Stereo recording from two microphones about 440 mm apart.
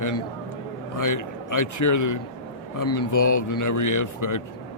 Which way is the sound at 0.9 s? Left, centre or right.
Left.